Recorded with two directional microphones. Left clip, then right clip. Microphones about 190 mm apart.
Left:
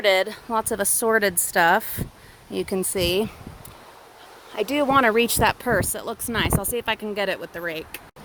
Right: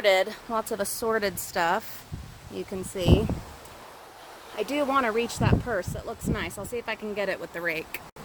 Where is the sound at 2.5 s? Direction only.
50° left (ahead or behind).